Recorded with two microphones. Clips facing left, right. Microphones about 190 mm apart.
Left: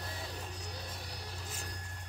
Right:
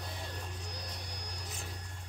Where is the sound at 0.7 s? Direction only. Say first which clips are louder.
Even; 5° left (ahead or behind).